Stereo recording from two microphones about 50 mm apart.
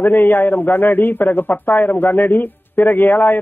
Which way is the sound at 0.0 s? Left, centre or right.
Left.